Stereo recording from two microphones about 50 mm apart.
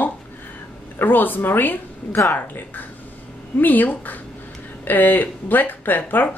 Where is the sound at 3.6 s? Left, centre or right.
Left.